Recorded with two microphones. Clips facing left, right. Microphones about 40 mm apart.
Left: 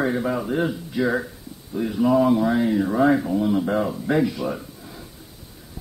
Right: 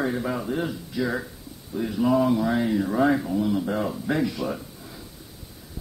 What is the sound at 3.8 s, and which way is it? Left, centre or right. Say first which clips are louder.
Speech: left 4 dB; centre.